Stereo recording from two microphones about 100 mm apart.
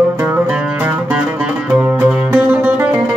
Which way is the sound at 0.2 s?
15° right (ahead or behind).